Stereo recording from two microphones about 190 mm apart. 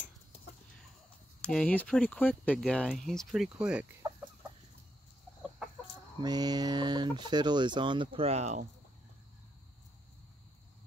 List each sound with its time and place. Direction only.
1.4 s speech: 5° left (ahead or behind)
4.0 s chicken: 20° right (ahead or behind)
6.2 s speech: 20° right (ahead or behind); by 8.6 s 35° right (ahead or behind)